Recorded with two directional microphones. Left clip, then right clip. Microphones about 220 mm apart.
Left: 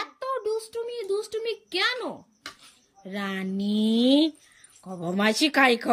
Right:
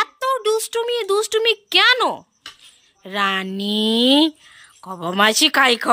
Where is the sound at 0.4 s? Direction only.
20° right (ahead or behind).